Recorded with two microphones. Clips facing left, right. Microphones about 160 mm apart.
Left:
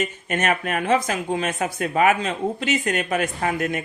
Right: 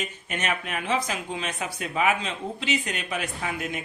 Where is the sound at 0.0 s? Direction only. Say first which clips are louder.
Left 7 dB; 50° left (ahead or behind).